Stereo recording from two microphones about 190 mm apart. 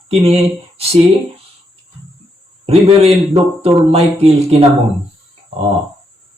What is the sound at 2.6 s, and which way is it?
Speech, 30° right (ahead or behind).